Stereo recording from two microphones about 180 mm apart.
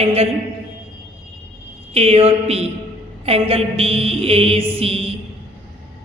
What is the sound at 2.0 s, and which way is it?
A woman's voice, 35° right (ahead or behind).